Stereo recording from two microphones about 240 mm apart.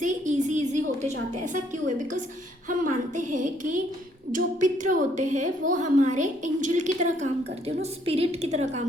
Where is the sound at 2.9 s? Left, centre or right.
Right.